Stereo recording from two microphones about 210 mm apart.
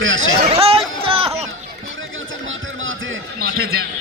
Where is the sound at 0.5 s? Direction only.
30° right (ahead or behind).